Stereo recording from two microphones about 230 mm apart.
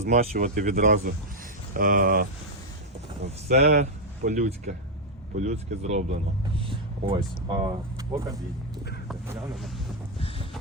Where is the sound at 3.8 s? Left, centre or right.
Right.